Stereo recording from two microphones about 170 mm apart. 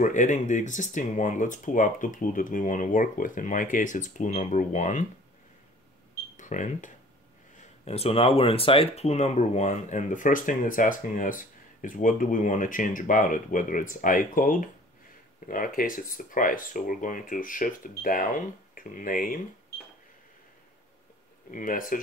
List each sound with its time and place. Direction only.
0.0 s speech: 45° left (ahead or behind)
6.3 s speech: 45° left (ahead or behind)
21.5 s speech: 50° left (ahead or behind)